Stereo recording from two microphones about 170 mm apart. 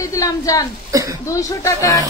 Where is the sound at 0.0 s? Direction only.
20° left (ahead or behind).